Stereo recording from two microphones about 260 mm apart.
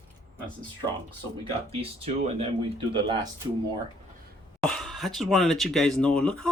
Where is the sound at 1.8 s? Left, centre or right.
Right.